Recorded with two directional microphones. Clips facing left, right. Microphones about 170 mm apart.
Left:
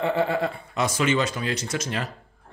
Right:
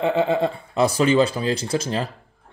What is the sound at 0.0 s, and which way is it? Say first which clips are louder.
Speech: right 4 dB; 20° right (ahead or behind).